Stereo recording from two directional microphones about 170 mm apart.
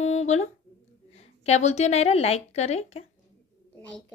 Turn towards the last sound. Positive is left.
turn(degrees=40)  # may be behind; listen again after turning